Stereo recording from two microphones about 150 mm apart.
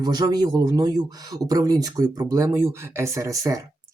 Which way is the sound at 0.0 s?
25° right (ahead or behind).